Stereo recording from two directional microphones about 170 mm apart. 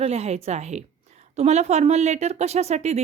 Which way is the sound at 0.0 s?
40° right (ahead or behind).